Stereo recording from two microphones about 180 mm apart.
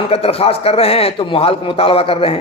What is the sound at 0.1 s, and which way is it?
A man's voice, 35° left (ahead or behind).